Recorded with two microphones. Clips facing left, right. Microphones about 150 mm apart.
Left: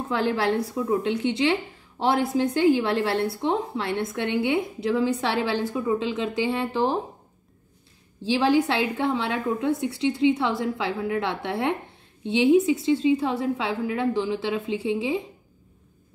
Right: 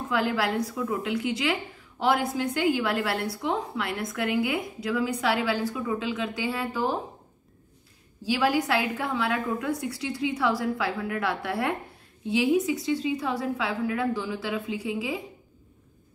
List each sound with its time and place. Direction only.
0.1 s a woman's voice: 30° left (ahead or behind)
8.2 s a woman's voice: 25° left (ahead or behind)